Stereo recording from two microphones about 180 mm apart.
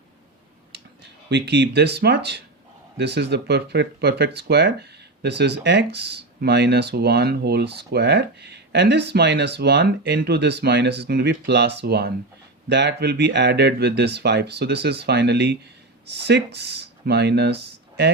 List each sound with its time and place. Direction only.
1.3 s speech: 70° right (ahead or behind)